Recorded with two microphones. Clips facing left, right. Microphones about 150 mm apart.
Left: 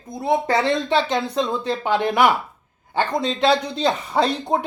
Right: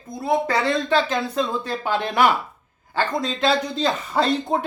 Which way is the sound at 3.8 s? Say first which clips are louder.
Left 2 dB; 20° left (ahead or behind).